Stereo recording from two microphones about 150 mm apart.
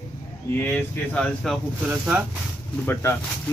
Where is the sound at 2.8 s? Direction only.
15° left (ahead or behind).